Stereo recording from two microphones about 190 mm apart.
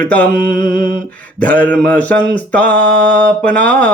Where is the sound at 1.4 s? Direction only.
10° left (ahead or behind).